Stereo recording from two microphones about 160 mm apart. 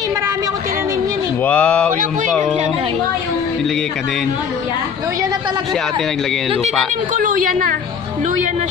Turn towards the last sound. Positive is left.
turn(degrees=-60)  # may be behind; listen again after turning